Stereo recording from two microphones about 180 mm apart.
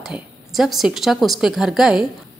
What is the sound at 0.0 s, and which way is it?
A woman's voice, centre (ahead or behind).